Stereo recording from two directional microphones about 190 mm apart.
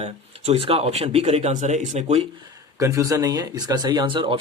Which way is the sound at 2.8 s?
15° right (ahead or behind).